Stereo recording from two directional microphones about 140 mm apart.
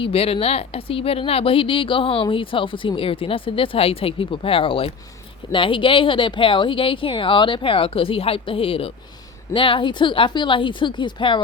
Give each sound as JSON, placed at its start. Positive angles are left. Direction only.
{"t": 0.0, "sound": "speech", "side_deg": 45}